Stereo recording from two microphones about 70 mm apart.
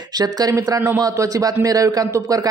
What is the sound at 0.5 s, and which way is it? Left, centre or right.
Speech, right.